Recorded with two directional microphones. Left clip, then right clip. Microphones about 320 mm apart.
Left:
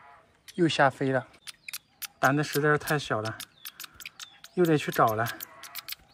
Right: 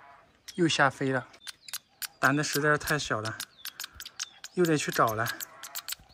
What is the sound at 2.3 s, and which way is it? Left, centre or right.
Speech, centre.